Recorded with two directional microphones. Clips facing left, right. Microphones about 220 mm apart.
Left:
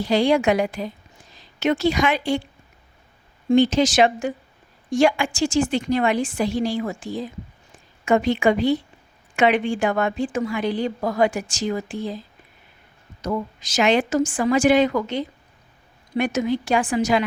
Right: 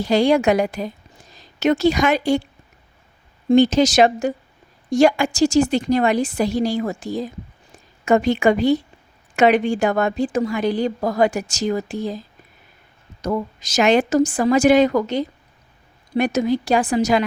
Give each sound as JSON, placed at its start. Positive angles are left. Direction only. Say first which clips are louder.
{"t": 0.0, "sound": "a woman's voice", "louder": "right 2 dB", "side_deg": -45}
{"t": 3.5, "sound": "a woman's voice", "louder": "right 3 dB", "side_deg": -40}
{"t": 13.2, "sound": "a woman's voice", "louder": "right 3 dB", "side_deg": -40}